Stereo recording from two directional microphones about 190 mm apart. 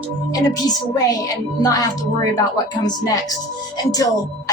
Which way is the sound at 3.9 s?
20° left (ahead or behind).